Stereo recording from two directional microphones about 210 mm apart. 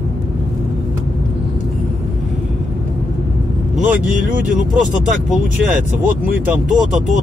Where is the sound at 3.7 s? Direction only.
40° right (ahead or behind).